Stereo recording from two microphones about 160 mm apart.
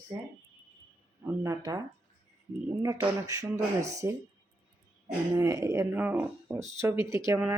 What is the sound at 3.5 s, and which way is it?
Speech, 45° right (ahead or behind).